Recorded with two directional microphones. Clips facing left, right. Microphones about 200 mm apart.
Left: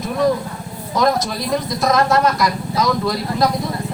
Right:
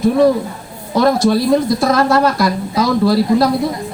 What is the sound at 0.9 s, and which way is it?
Speech, 30° right (ahead or behind).